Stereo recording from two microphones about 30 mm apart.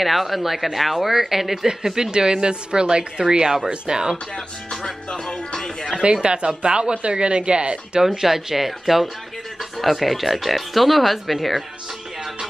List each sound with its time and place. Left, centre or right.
0.0 s speech: centre
2.0 s a woman's voice: right
5.9 s speech: right
8.0 s speech: centre